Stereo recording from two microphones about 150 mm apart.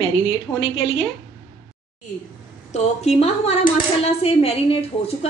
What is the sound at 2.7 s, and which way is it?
Speech, 45° left (ahead or behind).